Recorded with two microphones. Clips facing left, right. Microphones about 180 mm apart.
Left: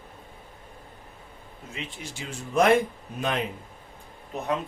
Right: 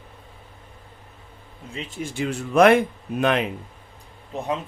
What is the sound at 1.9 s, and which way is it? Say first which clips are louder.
Speech: right 11 dB; 55° right (ahead or behind).